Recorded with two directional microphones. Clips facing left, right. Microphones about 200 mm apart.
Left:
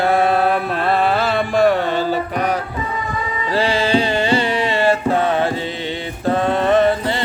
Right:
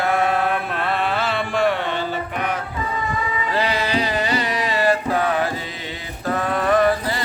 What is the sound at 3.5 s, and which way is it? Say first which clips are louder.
Music: left 6 dB; 30° left (ahead or behind).